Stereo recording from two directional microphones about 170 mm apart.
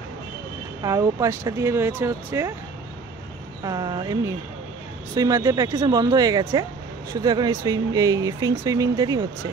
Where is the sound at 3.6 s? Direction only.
20° right (ahead or behind).